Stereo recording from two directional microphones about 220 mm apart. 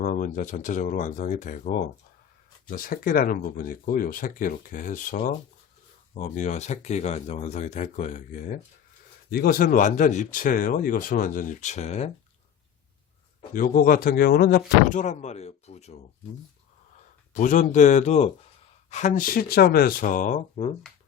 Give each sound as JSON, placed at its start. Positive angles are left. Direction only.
{"t": 0.0, "sound": "speech", "side_deg": 35}
{"t": 13.5, "sound": "speech", "side_deg": 40}
{"t": 14.8, "sound": "speech", "side_deg": 35}
{"t": 17.3, "sound": "speech", "side_deg": 35}